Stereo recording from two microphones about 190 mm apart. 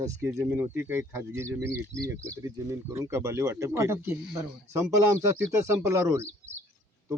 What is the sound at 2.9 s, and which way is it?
A man's voice, 15° right (ahead or behind).